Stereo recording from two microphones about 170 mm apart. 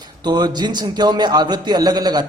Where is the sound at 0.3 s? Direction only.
25° right (ahead or behind).